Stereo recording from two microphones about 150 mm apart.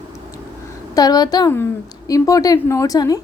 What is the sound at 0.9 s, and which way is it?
A woman's voice, 25° left (ahead or behind).